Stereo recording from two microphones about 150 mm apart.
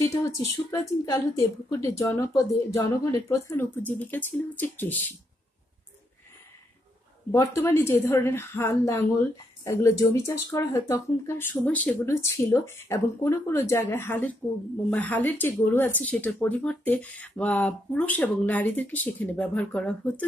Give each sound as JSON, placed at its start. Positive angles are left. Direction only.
{"t": 1.0, "sound": "a woman's voice", "side_deg": 20}
{"t": 7.2, "sound": "a woman's voice", "side_deg": 20}